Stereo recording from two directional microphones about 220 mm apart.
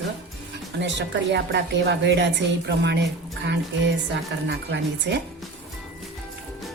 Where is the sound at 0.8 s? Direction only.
55° right (ahead or behind).